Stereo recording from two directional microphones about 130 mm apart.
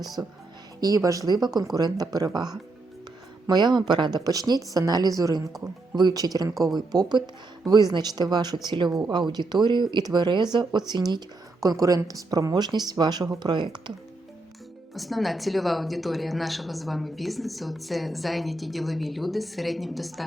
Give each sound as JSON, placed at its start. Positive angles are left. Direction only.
{"t": 0.2, "sound": "speech", "side_deg": -25}
{"t": 5.5, "sound": "a woman's voice", "side_deg": 0}
{"t": 6.0, "sound": "speech", "side_deg": -30}
{"t": 14.9, "sound": "a woman's voice", "side_deg": 0}